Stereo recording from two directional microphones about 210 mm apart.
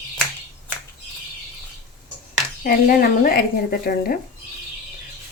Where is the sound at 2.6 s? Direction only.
45° left (ahead or behind).